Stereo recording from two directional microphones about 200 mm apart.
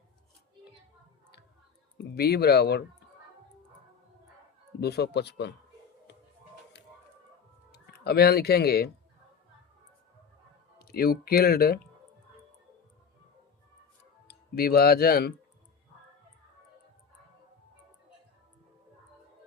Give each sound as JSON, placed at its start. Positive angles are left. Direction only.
{"t": 2.0, "sound": "speech", "side_deg": 50}
{"t": 4.8, "sound": "speech", "side_deg": 55}
{"t": 7.7, "sound": "speech", "side_deg": 55}
{"t": 10.8, "sound": "speech", "side_deg": 50}
{"t": 14.3, "sound": "speech", "side_deg": 50}